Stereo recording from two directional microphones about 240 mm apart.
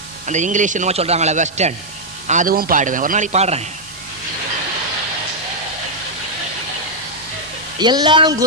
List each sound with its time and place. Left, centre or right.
0.3 s a man's voice: right
7.8 s speech: centre